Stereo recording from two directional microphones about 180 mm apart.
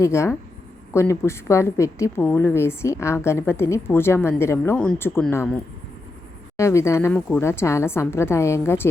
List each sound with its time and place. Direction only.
0.0 s a woman's voice: 15° left (ahead or behind)
6.6 s a woman's voice: 15° left (ahead or behind)